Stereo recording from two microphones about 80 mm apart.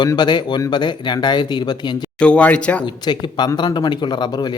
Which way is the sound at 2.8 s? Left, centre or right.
Left.